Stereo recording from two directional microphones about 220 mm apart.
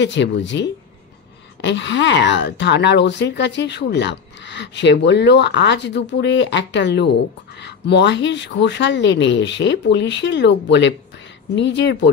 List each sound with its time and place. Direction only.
0.0 s speech: 55° left (ahead or behind)